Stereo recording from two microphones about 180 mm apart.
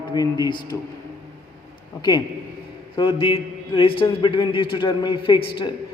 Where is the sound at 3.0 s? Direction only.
30° left (ahead or behind).